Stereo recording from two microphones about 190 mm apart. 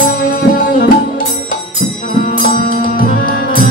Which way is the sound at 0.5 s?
50° left (ahead or behind).